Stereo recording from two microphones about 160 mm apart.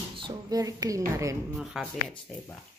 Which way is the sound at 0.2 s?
20° right (ahead or behind).